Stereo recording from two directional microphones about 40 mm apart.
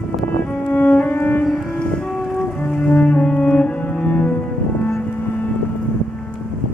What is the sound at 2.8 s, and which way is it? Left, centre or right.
Music, left.